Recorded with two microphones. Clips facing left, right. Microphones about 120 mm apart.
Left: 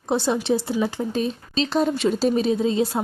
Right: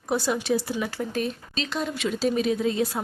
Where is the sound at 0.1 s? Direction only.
25° left (ahead or behind).